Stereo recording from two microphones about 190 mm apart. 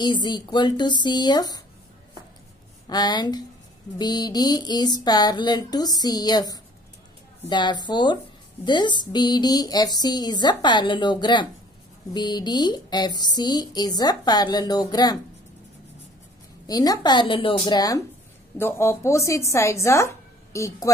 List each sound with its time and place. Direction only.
0.0 s speech: 25° left (ahead or behind)
2.9 s speech: 20° left (ahead or behind)
16.6 s a woman's voice: 20° left (ahead or behind)